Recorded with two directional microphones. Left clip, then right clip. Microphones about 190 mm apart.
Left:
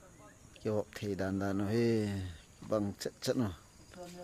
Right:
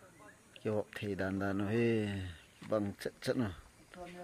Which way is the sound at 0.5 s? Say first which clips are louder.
Left 1 dB; 10° left (ahead or behind).